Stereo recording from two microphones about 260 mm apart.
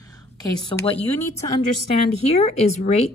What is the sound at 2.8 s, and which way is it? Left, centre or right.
Speech, left.